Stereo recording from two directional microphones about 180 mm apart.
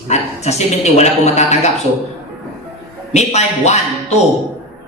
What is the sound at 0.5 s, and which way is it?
Speech, 40° left (ahead or behind).